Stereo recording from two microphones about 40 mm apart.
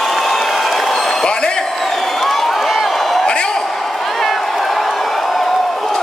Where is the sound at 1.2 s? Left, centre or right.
Left.